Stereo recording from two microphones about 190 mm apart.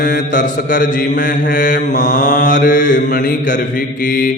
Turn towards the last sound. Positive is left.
turn(degrees=50)  # may be behind; listen again after turning